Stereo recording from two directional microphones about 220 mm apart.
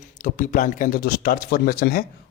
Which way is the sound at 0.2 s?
35° left (ahead or behind).